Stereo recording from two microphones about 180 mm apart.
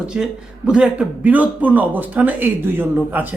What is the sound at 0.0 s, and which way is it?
A man's voice, 5° right (ahead or behind).